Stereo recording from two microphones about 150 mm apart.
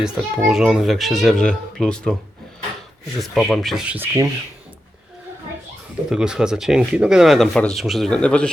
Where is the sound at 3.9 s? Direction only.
20° right (ahead or behind).